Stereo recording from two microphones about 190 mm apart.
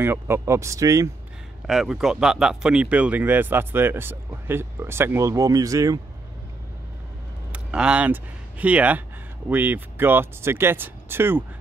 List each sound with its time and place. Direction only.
0.0 s speech: 10° right (ahead or behind)
1.7 s speech: centre (ahead or behind); by 5.9 s 20° right (ahead or behind)
7.5 s speech: 5° right (ahead or behind)